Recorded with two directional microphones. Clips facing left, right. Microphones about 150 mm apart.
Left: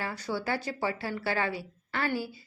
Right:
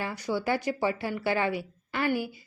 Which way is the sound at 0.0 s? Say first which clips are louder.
Right 3 dB; 15° right (ahead or behind).